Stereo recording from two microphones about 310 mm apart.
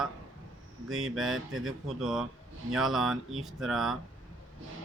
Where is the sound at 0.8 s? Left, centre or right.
Right.